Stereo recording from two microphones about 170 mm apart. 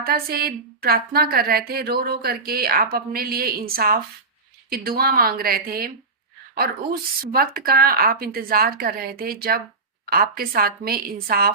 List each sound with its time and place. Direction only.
0.0 s a woman's voice: 65° right (ahead or behind)
7.2 s a woman's voice: 60° right (ahead or behind)